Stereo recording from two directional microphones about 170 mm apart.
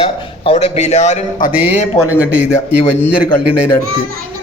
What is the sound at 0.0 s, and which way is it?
A man's voice, 35° left (ahead or behind).